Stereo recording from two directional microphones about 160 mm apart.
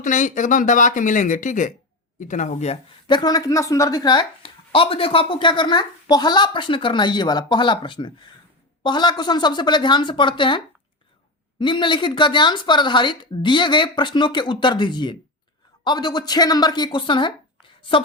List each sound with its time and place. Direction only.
0.0 s speech: 50° left (ahead or behind)
3.1 s a woman's voice: 25° left (ahead or behind)
11.6 s a woman's voice: 30° left (ahead or behind)